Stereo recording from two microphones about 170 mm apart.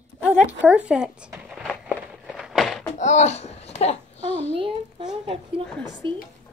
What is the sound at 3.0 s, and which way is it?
A child's voice, 40° left (ahead or behind).